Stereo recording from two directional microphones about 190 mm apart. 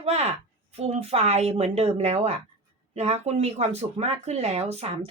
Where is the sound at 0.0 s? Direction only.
35° right (ahead or behind).